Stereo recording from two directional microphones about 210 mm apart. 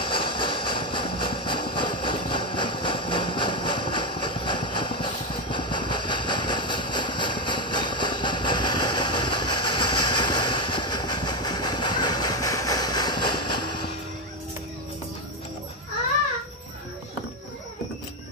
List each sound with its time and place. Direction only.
0.0 s vehicle: 25° left (ahead or behind)